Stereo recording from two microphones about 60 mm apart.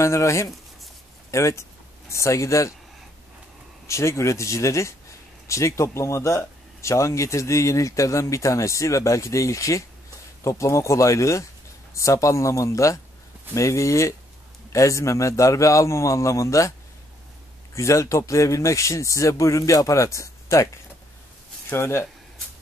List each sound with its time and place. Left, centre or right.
0.0 s speech: left
3.8 s speech: left
17.7 s speech: left
21.6 s speech: left